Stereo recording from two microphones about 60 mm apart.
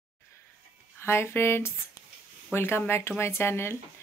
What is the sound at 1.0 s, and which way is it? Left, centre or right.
Speech, left.